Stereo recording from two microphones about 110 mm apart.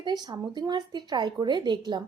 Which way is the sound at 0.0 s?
40° right (ahead or behind).